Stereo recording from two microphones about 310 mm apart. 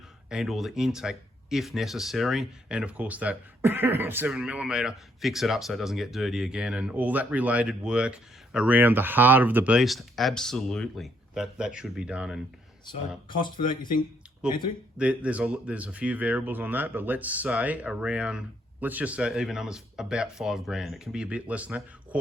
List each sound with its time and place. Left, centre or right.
0.3 s speech: centre
12.8 s speech: centre
14.4 s speech: centre